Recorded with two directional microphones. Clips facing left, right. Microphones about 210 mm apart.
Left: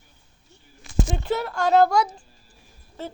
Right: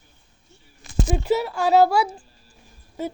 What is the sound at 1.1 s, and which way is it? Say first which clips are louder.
Speech: right 8 dB; 5° right (ahead or behind).